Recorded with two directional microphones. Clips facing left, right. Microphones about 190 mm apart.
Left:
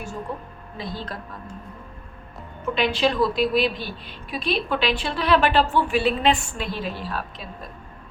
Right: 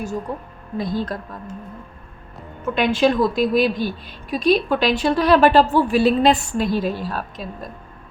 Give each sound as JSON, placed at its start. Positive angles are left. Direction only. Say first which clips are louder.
{"t": 0.3, "sound": "a woman's voice", "louder": "right 5 dB", "side_deg": -45}
{"t": 2.7, "sound": "a woman's voice", "louder": "right 4 dB", "side_deg": -50}